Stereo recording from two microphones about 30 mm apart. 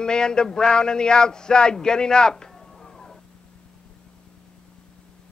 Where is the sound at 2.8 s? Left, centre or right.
Centre.